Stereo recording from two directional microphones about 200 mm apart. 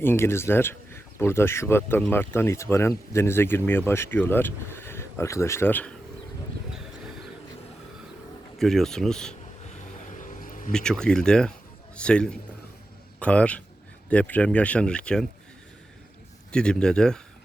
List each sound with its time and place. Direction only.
0.0 s speech: 10° left (ahead or behind)
8.5 s speech: centre (ahead or behind)
10.2 s vehicle: 40° left (ahead or behind)
10.7 s speech: 5° left (ahead or behind)
16.5 s speech: 5° left (ahead or behind)